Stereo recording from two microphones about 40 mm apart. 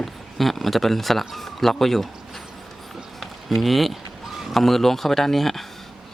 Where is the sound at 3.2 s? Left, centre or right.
Centre.